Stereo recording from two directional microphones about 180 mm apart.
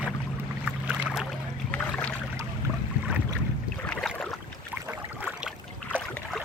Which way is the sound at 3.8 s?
5° left (ahead or behind).